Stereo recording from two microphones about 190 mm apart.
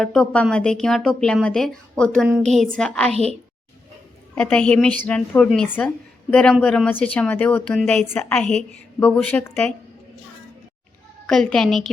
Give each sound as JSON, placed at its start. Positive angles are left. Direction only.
{"t": 0.0, "sound": "a woman's voice", "side_deg": 5}
{"t": 3.1, "sound": "a woman's voice", "side_deg": -35}
{"t": 4.4, "sound": "a woman's voice", "side_deg": 5}
{"t": 11.3, "sound": "a woman's voice", "side_deg": 5}